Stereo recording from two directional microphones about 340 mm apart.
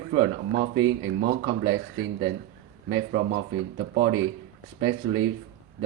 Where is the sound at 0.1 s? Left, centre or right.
Right.